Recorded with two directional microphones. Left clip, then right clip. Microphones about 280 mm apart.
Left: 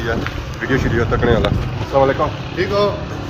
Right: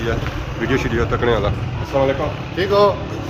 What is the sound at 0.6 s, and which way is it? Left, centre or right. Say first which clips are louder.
Speech: left 1 dB; centre.